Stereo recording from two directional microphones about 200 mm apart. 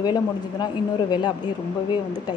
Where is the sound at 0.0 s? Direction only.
20° left (ahead or behind).